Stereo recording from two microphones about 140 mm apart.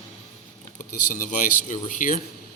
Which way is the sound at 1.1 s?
65° left (ahead or behind).